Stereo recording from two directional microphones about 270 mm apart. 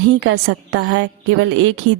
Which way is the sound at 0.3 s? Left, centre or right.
Right.